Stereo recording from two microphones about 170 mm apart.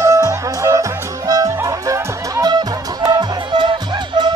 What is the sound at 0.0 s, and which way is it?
Music, 15° right (ahead or behind).